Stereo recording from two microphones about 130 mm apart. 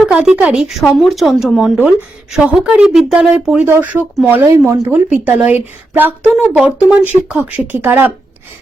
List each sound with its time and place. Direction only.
0.0 s a sound: 5° right (ahead or behind)
0.4 s speech: 5° right (ahead or behind)
4.5 s speech: 25° right (ahead or behind)